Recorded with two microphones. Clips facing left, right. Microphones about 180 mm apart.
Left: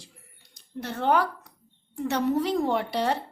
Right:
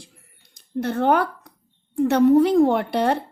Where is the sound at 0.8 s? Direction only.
55° right (ahead or behind).